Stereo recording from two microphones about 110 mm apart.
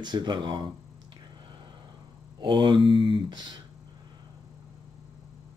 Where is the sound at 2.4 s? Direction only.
45° right (ahead or behind).